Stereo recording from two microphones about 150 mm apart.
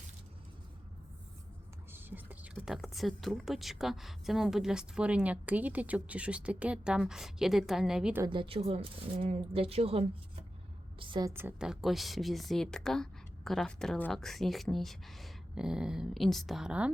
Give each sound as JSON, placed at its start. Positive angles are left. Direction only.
{"t": 1.9, "sound": "whispering", "side_deg": -15}
{"t": 2.6, "sound": "speech", "side_deg": 0}
{"t": 8.2, "sound": "a woman's voice", "side_deg": -35}
{"t": 11.3, "sound": "a woman's voice", "side_deg": -15}
{"t": 11.6, "sound": "speech", "side_deg": 0}